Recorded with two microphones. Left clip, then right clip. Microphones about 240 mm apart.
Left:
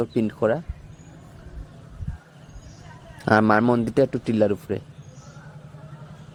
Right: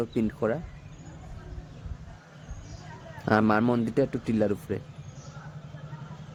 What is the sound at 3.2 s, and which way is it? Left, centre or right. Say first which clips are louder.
A man's voice: left 6 dB; centre.